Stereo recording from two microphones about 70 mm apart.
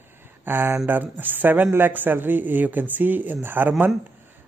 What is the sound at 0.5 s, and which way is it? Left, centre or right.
A man's voice, right.